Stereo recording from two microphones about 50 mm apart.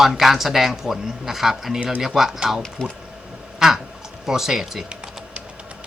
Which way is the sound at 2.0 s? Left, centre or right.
Centre.